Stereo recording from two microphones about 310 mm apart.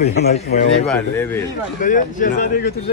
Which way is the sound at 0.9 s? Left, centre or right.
Centre.